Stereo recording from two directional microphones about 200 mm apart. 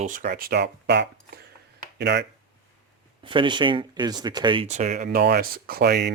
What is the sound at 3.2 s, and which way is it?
Speech, 25° right (ahead or behind).